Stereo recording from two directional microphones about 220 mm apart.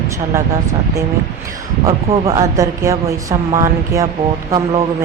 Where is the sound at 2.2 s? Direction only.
15° right (ahead or behind).